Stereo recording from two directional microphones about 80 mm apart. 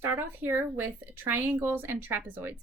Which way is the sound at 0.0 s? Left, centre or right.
Right.